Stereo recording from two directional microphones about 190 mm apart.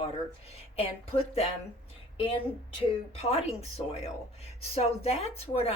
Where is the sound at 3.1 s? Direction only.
35° left (ahead or behind).